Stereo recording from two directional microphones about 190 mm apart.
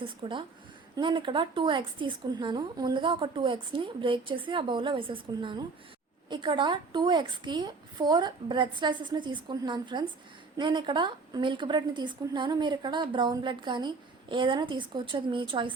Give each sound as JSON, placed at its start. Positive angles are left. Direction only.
{"t": 0.0, "sound": "a woman's voice", "side_deg": -25}